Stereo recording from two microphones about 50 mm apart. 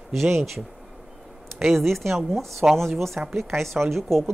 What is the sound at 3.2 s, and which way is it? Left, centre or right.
Speech, right.